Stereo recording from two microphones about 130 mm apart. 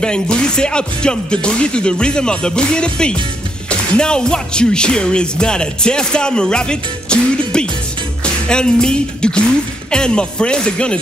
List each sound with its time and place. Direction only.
0.0 s speech: 5° left (ahead or behind)